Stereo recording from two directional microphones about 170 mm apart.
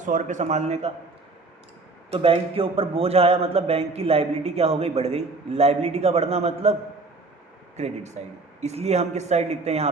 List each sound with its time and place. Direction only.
0.0 s a man's voice: 45° right (ahead or behind)
2.1 s a man's voice: 35° right (ahead or behind)
7.8 s a man's voice: 40° right (ahead or behind)